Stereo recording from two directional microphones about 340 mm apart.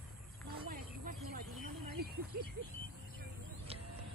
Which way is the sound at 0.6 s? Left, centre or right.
Right.